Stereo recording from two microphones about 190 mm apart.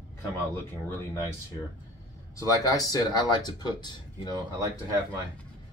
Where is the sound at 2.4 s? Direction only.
20° left (ahead or behind).